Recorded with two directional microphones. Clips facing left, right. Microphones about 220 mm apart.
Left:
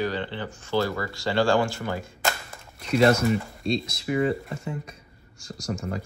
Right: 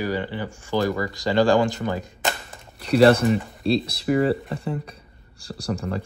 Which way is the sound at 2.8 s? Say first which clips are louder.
Right 4 dB; 35° right (ahead or behind).